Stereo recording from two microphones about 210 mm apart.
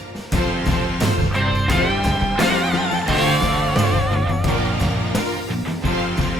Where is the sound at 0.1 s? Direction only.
Centre (ahead or behind).